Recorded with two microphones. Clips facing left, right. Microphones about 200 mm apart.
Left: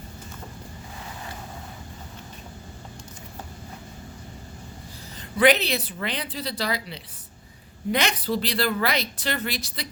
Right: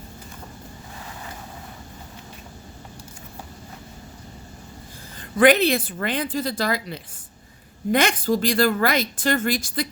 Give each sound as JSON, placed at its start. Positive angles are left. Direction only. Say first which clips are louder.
{"t": 5.4, "sound": "speech", "louder": "right 4 dB", "side_deg": -50}